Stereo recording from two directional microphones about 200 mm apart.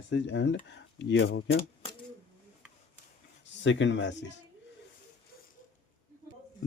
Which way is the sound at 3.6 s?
65° left (ahead or behind).